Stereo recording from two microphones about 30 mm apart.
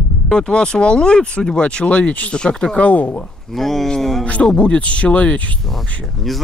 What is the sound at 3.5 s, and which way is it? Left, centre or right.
Speech, centre.